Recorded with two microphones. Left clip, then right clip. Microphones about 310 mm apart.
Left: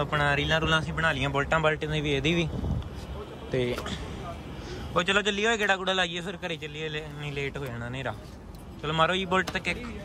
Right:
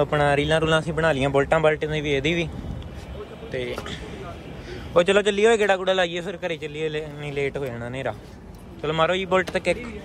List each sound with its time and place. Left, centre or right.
0.0 s a man's voice: centre
3.5 s speech: left
4.9 s a man's voice: centre